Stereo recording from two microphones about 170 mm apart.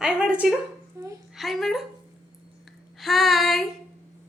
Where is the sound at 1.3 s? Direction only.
Centre (ahead or behind).